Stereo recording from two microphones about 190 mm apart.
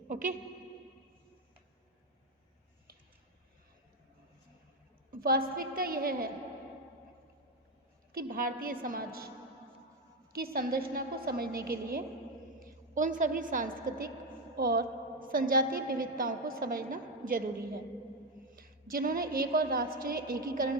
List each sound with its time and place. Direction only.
0.1 s speech: 40° right (ahead or behind)
5.1 s a woman's voice: 50° right (ahead or behind)
8.1 s a woman's voice: 50° right (ahead or behind)
10.3 s a woman's voice: 50° right (ahead or behind)
18.5 s a woman's voice: 50° right (ahead or behind)